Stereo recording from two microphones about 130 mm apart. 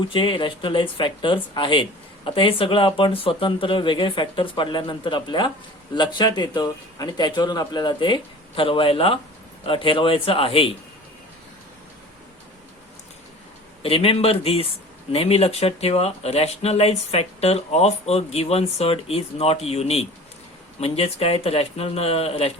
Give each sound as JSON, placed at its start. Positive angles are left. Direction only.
{"t": 0.1, "sound": "speech", "side_deg": 40}
{"t": 13.8, "sound": "speech", "side_deg": 45}